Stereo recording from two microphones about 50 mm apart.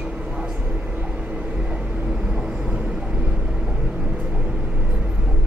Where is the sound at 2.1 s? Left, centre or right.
Centre.